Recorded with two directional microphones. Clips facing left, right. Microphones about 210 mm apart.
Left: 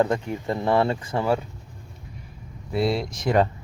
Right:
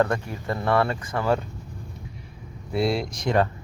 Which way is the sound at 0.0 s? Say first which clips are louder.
Left 1 dB; 20° left (ahead or behind).